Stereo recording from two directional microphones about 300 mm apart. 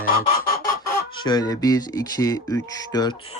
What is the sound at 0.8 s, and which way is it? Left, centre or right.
Speech, centre.